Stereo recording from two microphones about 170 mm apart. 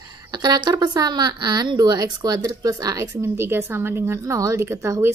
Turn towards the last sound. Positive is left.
turn(degrees=-15)  # may be behind; listen again after turning